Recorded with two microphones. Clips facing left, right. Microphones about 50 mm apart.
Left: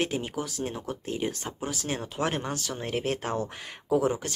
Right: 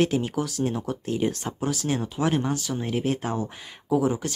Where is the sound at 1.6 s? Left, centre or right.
Left.